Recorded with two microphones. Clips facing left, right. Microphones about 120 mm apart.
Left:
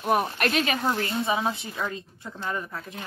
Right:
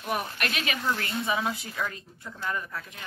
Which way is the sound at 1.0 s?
25° left (ahead or behind).